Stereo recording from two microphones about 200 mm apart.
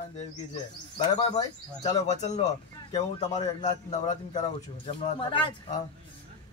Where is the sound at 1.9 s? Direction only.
35° left (ahead or behind).